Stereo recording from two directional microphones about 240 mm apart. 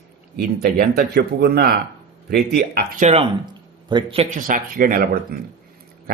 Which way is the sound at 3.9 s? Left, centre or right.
Right.